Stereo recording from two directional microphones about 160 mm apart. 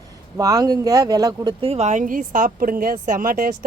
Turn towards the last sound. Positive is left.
turn(degrees=-65)  # may be behind; listen again after turning